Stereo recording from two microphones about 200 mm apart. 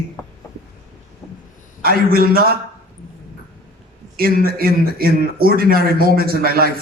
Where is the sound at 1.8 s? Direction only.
50° right (ahead or behind).